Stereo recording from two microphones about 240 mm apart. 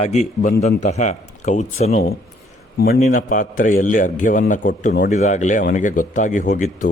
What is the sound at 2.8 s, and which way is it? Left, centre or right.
A man's voice, left.